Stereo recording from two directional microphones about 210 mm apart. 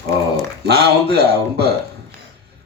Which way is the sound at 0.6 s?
50° right (ahead or behind).